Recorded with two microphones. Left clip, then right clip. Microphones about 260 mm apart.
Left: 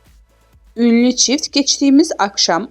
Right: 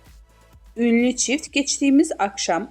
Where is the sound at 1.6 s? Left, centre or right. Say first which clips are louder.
Left 6 dB; centre.